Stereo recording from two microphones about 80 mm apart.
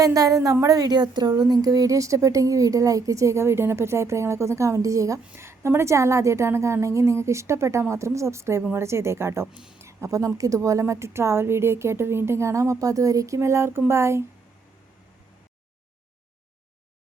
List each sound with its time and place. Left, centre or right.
0.0 s a woman's voice: right
9.5 s speech: centre
9.8 s a woman's voice: right